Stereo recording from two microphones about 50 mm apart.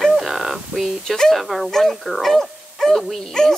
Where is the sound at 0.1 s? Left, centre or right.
Centre.